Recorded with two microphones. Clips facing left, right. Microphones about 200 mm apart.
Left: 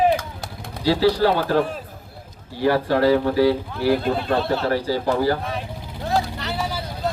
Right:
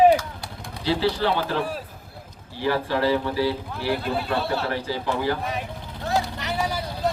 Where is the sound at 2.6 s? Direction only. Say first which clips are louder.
Left 5 dB; 50° left (ahead or behind).